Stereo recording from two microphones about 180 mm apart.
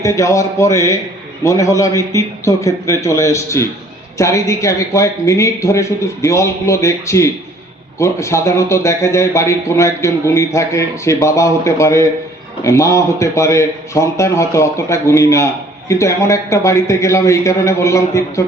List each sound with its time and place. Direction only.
0.0 s a man's voice: 15° left (ahead or behind)